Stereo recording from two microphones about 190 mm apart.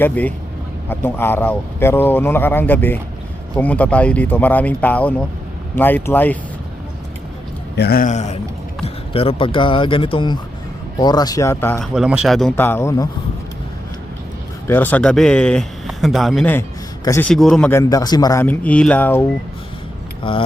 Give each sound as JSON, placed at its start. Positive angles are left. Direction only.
{"t": 0.0, "sound": "speech", "side_deg": 10}
{"t": 7.8, "sound": "a man's voice", "side_deg": 55}
{"t": 11.8, "sound": "a man's voice", "side_deg": -5}
{"t": 14.7, "sound": "a man's voice", "side_deg": 10}
{"t": 17.2, "sound": "a man's voice", "side_deg": 5}
{"t": 17.8, "sound": "speech", "side_deg": 20}
{"t": 20.2, "sound": "speech", "side_deg": 25}